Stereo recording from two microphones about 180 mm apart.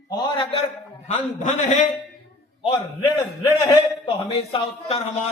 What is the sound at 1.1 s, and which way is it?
Speech, 40° left (ahead or behind).